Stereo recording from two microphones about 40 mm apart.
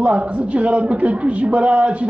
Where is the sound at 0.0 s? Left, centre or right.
Right.